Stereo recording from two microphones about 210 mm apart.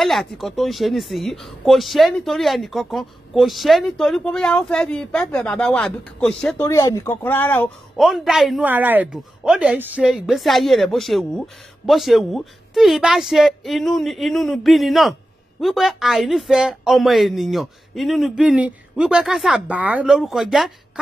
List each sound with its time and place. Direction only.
0.0 s speech: centre (ahead or behind)